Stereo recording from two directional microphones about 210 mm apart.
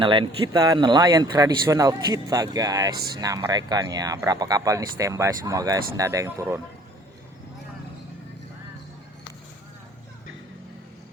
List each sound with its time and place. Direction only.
0.0 s speech: 25° right (ahead or behind)